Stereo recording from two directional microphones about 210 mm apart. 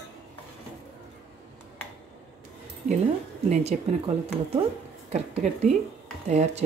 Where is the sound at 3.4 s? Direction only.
30° right (ahead or behind).